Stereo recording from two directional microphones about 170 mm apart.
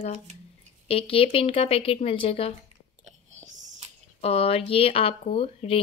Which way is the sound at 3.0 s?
40° right (ahead or behind).